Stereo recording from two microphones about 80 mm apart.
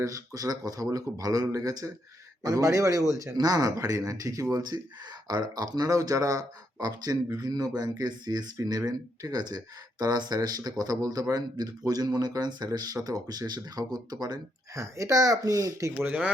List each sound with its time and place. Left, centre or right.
0.0 s speech: right
5.3 s speech: right
14.8 s speech: right
16.0 s speech: centre